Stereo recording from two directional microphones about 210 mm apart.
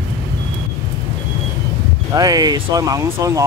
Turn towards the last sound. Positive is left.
turn(degrees=-15)  # may be behind; listen again after turning